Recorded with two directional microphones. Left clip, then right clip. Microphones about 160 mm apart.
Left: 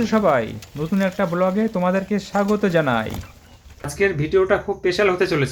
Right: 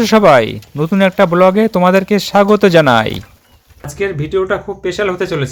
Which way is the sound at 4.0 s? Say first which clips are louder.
Right 2 dB; 15° right (ahead or behind).